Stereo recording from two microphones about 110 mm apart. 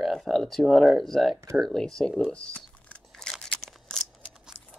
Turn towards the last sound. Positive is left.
turn(degrees=5)  # may be behind; listen again after turning